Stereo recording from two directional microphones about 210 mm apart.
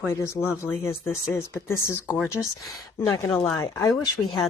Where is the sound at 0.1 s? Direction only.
15° left (ahead or behind).